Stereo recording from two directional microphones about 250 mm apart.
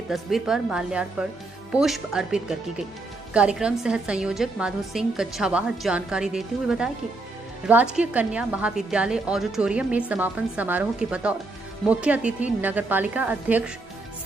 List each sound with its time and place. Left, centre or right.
0.1 s a woman's voice: centre